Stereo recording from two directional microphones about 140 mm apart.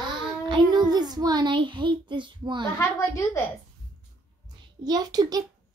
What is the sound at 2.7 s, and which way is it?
Speech, 20° left (ahead or behind).